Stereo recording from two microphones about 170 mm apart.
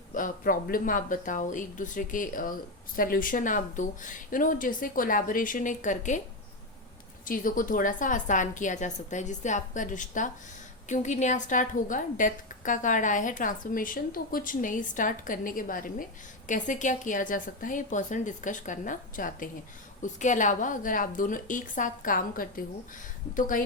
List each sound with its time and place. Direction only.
0.1 s speech: 55° left (ahead or behind)
7.3 s speech: 55° left (ahead or behind)